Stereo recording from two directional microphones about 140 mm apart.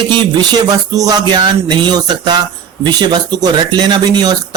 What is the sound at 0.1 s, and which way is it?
Speech, 35° right (ahead or behind).